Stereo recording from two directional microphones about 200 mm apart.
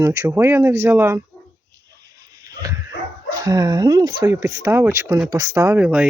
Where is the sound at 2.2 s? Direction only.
15° right (ahead or behind).